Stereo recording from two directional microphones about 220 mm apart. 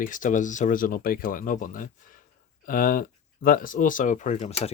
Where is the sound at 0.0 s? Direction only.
35° left (ahead or behind).